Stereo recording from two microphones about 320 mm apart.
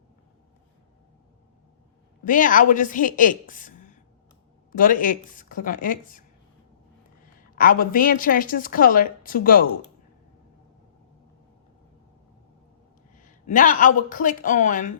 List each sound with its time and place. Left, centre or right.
2.2 s a woman's voice: left
7.5 s a woman's voice: left
13.5 s a woman's voice: left